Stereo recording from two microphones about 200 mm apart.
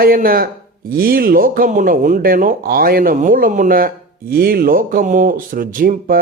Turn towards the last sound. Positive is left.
turn(degrees=-45)  # may be behind; listen again after turning